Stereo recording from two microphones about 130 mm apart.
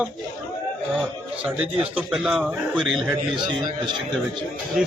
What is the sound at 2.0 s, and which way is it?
A man's voice, 5° right (ahead or behind).